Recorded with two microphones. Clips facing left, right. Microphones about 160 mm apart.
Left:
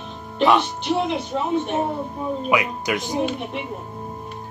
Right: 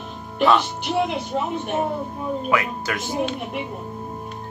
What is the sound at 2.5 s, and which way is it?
Speech, 15° left (ahead or behind).